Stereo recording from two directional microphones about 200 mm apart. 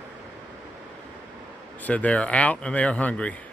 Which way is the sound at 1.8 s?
10° left (ahead or behind).